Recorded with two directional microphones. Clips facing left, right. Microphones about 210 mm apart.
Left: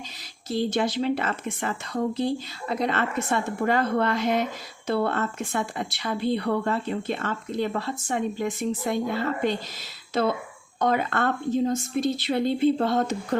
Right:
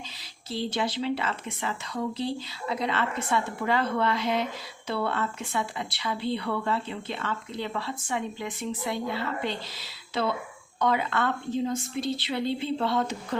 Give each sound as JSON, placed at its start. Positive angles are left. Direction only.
{"t": 0.5, "sound": "speech", "side_deg": 50}